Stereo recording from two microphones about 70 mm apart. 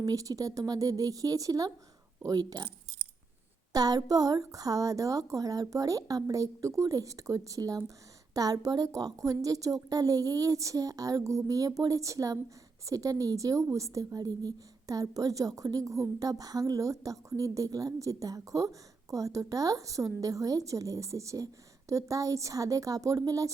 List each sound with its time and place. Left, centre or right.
0.0 s a woman's voice: right
3.7 s a woman's voice: right